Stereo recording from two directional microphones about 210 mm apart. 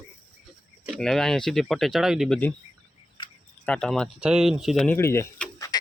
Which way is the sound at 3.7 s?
5° left (ahead or behind).